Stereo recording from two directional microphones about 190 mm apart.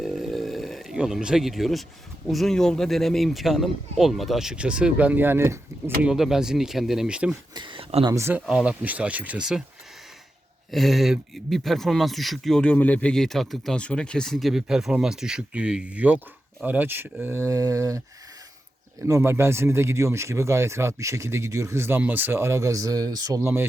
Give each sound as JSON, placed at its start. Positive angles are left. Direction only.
{"t": 0.0, "sound": "a sound", "side_deg": 0}
{"t": 2.2, "sound": "speech", "side_deg": 0}
{"t": 7.5, "sound": "speech", "side_deg": -25}
{"t": 8.1, "sound": "speech", "side_deg": -15}
{"t": 10.7, "sound": "speech", "side_deg": 0}
{"t": 19.0, "sound": "speech", "side_deg": -15}